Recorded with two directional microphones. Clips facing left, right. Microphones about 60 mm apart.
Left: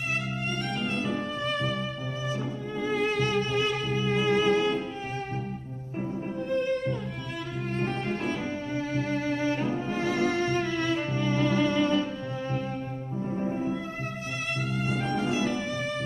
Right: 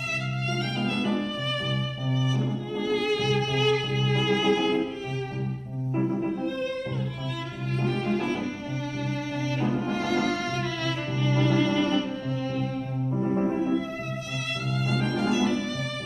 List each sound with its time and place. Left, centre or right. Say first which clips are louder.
0.7 s music: right 4 dB; left
7.8 s cello: right 4 dB; left
9.4 s music: even; left
14.8 s music: right 3 dB; left